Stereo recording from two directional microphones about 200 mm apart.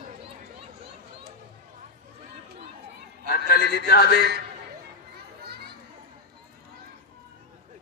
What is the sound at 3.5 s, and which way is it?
Speech, 55° left (ahead or behind).